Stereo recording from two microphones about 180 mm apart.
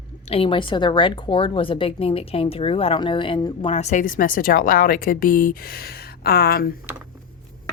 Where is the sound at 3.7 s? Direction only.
40° left (ahead or behind); by 6.7 s 55° left (ahead or behind).